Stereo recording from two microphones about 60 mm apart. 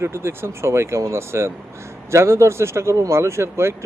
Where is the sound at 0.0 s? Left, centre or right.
Right.